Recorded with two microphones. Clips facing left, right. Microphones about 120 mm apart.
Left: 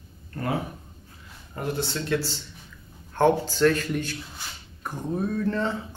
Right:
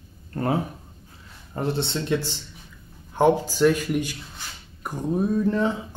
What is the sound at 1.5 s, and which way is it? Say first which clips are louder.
Speech: right 3 dB; 30° right (ahead or behind).